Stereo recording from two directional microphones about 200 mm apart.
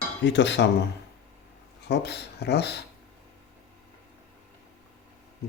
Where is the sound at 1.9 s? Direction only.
55° left (ahead or behind).